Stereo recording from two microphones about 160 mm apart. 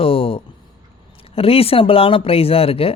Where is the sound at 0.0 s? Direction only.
35° left (ahead or behind).